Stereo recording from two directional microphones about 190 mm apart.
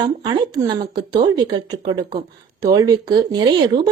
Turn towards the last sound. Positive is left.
turn(degrees=-20)  # may be behind; listen again after turning